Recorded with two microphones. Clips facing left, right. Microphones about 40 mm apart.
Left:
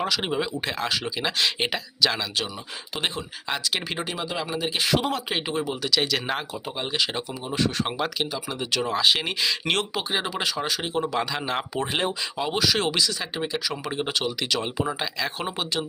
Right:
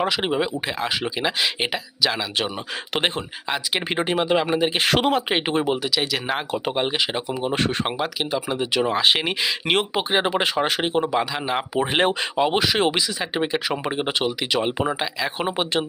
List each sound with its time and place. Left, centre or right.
0.0 s speech: centre
3.8 s speech: right
4.8 s speech: right
5.1 s speech: right
5.8 s speech: centre
6.9 s speech: right
7.4 s speech: right
7.9 s speech: centre
8.3 s speech: right
10.1 s speech: right
11.0 s speech: centre
12.4 s speech: right